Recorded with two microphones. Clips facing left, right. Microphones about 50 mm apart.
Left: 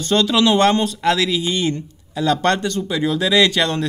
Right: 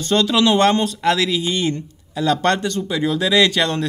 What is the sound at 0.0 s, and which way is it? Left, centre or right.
Speech, centre.